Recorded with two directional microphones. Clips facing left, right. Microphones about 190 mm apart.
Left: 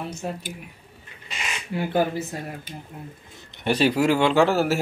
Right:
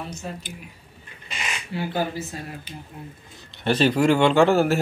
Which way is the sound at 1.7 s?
55° left (ahead or behind).